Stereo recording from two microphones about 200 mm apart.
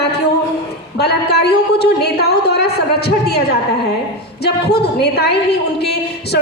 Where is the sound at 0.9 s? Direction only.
55° left (ahead or behind).